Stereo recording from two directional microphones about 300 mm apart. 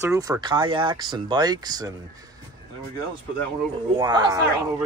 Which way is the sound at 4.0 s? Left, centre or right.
Centre.